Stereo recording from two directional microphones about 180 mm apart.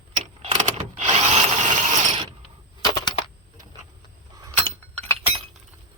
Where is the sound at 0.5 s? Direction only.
40° right (ahead or behind).